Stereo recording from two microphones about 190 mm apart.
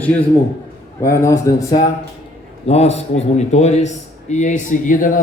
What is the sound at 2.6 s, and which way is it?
A man's voice, 35° left (ahead or behind).